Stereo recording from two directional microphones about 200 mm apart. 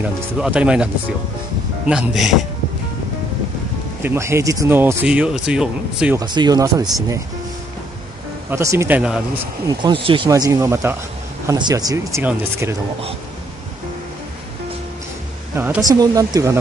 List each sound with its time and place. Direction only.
0.4 s speech: 5° right (ahead or behind)
1.9 s speech: 5° right (ahead or behind)
4.0 s speech: 10° right (ahead or behind)
6.1 s speech: 20° right (ahead or behind)
8.5 s speech: 15° right (ahead or behind)
10.0 s speech: 25° right (ahead or behind)
15.5 s speech: 10° right (ahead or behind)